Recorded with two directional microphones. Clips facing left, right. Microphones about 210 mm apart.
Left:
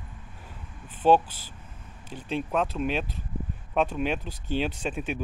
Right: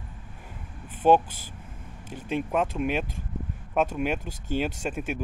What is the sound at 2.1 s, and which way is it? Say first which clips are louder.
Speech: right 1 dB; 10° right (ahead or behind).